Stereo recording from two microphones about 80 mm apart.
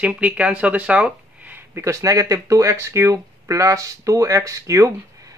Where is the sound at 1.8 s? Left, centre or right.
Right.